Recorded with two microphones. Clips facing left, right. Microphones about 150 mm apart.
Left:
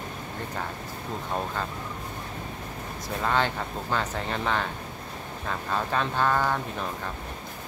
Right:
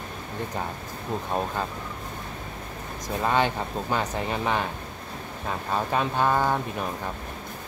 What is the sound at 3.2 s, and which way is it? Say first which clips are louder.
Speech: right 2 dB; 15° right (ahead or behind).